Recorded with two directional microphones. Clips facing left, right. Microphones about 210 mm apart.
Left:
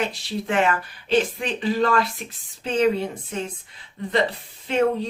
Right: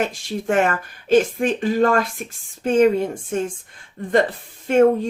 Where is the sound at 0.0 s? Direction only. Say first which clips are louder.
Right 3 dB; 45° right (ahead or behind).